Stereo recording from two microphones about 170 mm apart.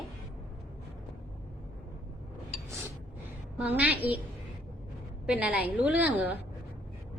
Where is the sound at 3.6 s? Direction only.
10° right (ahead or behind).